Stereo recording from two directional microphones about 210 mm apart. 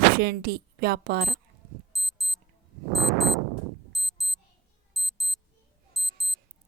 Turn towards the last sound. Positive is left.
turn(degrees=0)  # may be behind; listen again after turning